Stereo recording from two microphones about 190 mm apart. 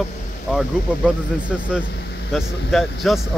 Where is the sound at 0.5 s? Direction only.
5° right (ahead or behind).